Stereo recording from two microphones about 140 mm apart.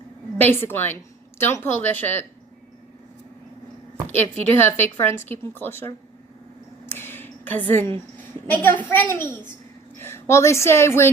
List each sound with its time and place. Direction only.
0.4 s speech: 15° left (ahead or behind)
4.1 s speech: 15° left (ahead or behind)
6.8 s a sound: 15° left (ahead or behind)
8.4 s a woman's voice: 10° left (ahead or behind)